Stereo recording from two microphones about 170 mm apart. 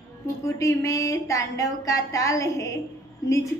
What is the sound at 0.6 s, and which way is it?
A woman's voice, 20° left (ahead or behind).